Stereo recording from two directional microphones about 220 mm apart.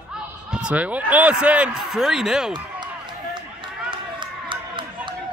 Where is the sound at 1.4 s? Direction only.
5° right (ahead or behind).